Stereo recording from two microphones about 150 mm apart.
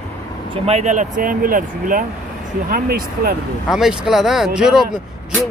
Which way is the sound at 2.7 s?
85° right.